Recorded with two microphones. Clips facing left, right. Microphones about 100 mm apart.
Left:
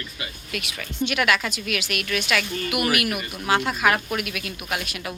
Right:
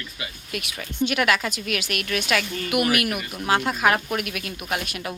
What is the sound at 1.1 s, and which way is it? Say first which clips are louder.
A woman's voice: left 1 dB; 35° right (ahead or behind).